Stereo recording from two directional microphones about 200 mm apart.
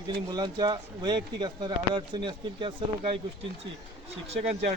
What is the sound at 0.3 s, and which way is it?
Speech, 20° right (ahead or behind).